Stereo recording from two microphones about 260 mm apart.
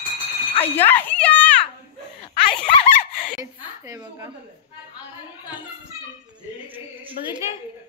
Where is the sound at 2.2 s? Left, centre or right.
Left.